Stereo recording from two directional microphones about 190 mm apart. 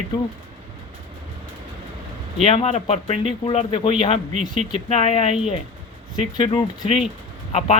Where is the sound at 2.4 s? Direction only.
30° left (ahead or behind).